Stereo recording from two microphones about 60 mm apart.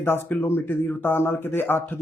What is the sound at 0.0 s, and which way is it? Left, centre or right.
Speech, left.